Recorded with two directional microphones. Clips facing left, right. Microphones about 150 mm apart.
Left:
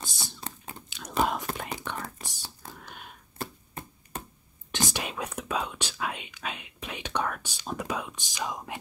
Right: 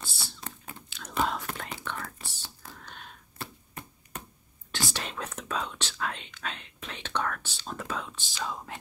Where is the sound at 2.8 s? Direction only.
10° left (ahead or behind).